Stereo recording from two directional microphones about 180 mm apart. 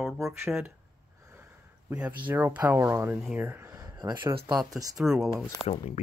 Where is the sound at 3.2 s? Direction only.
5° right (ahead or behind); by 4.1 s 20° right (ahead or behind).